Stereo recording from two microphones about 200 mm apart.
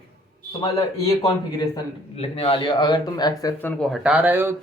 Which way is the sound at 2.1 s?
30° left (ahead or behind).